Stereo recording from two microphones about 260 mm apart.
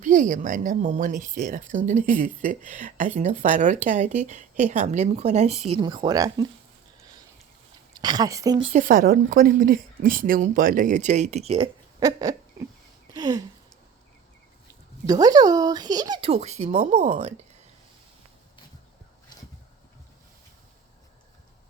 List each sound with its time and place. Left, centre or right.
0.0 s a woman's voice: right
7.9 s a woman's voice: centre
13.1 s a sound: centre
15.0 s a woman's voice: centre